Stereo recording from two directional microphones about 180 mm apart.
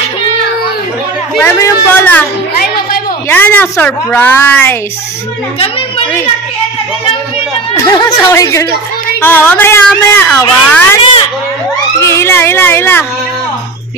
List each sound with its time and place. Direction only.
1.4 s speech: 10° left (ahead or behind)
3.3 s speech: 10° left (ahead or behind)
5.6 s a woman's voice: 30° left (ahead or behind)
7.8 s speech: 15° left (ahead or behind)
12.0 s speech: 15° left (ahead or behind)